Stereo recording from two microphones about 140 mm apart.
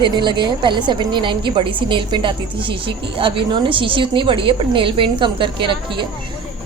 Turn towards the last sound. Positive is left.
turn(degrees=-35)  # may be behind; listen again after turning